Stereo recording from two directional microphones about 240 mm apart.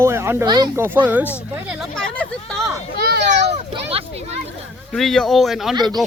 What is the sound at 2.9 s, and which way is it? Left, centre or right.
Children playing, right.